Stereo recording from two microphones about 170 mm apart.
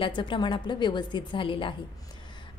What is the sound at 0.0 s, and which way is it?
A woman's voice, 30° left (ahead or behind).